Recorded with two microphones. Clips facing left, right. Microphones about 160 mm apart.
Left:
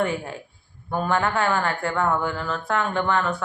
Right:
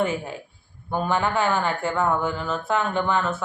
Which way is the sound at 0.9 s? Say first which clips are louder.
Even; centre (ahead or behind).